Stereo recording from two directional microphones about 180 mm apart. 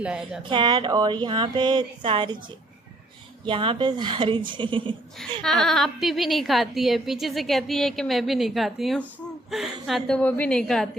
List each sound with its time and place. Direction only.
0.0 s a woman's voice: 5° right (ahead or behind)
0.4 s speech: 25° right (ahead or behind)
3.4 s speech: 25° right (ahead or behind)
5.4 s a woman's voice: centre (ahead or behind)